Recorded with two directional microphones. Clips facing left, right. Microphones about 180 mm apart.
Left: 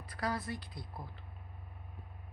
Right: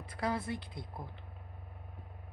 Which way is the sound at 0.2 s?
25° right (ahead or behind).